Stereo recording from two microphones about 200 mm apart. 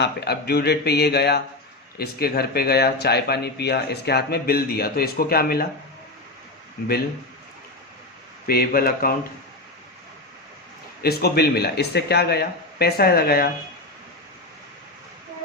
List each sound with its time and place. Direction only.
0.0 s speech: 55° left (ahead or behind)
8.4 s speech: 50° left (ahead or behind)
11.0 s speech: 50° left (ahead or behind)